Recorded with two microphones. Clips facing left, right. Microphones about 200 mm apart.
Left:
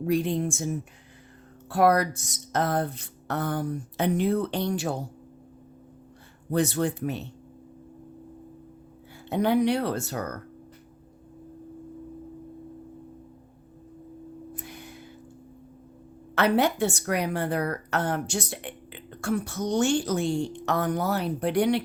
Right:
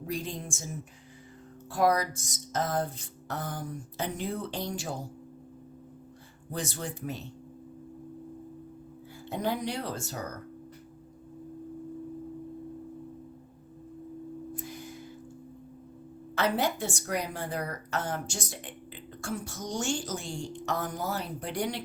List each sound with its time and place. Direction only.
0.0 s a woman's voice: 65° left (ahead or behind)
1.7 s a woman's voice: 65° left (ahead or behind)
6.5 s a woman's voice: 65° left (ahead or behind)
9.3 s a woman's voice: 65° left (ahead or behind)
14.5 s a sound: 65° left (ahead or behind)
16.3 s a woman's voice: 65° left (ahead or behind)